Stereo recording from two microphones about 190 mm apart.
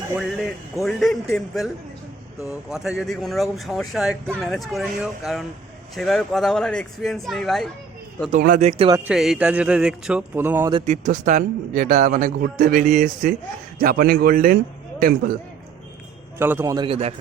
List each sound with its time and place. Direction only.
0.2 s speech: centre (ahead or behind)
8.3 s speech: 45° right (ahead or behind)
9.0 s speech: centre (ahead or behind)
10.7 s speech: 30° right (ahead or behind); by 15.3 s 50° right (ahead or behind)
16.4 s a man's voice: 10° right (ahead or behind); by 17.2 s 30° right (ahead or behind)